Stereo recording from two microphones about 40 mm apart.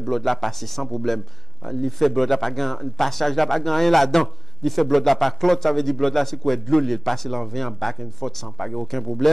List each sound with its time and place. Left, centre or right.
0.0 s speech: centre